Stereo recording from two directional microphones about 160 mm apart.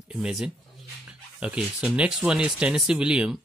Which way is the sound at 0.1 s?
5° right (ahead or behind).